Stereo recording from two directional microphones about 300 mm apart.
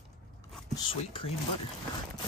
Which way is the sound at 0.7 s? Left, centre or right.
Centre.